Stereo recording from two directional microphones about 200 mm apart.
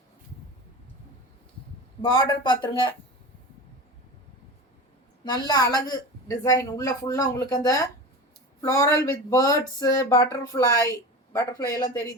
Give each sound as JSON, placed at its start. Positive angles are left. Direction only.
{"t": 2.0, "sound": "speech", "side_deg": 20}
{"t": 5.2, "sound": "speech", "side_deg": 20}